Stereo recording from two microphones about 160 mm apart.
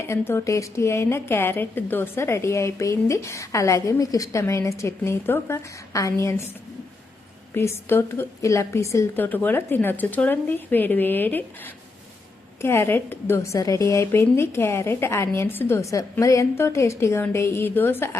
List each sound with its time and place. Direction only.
0.0 s a woman's voice: 15° left (ahead or behind)
7.5 s a woman's voice: 15° left (ahead or behind)